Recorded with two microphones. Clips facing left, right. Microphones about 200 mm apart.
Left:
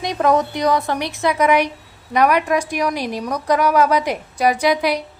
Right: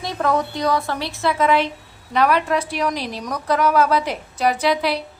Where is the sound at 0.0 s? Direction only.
20° left (ahead or behind).